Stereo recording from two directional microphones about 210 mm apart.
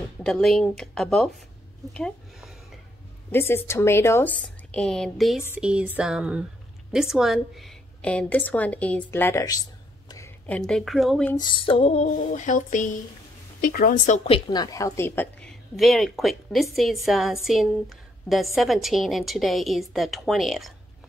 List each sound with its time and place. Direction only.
0.2 s a woman's voice: centre (ahead or behind)
2.0 s a sound: 5° left (ahead or behind)
3.3 s a woman's voice: 10° left (ahead or behind)
11.3 s music: 20° left (ahead or behind); by 12.9 s 40° left (ahead or behind)
13.6 s a woman's voice: 45° left (ahead or behind); by 20.7 s centre (ahead or behind)